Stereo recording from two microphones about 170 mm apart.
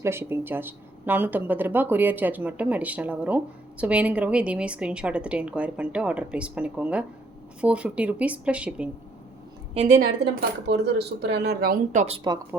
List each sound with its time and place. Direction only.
0.0 s speech: 15° right (ahead or behind)
10.7 s speech: 75° right (ahead or behind); by 12.2 s 40° right (ahead or behind)
12.2 s speech: 20° right (ahead or behind)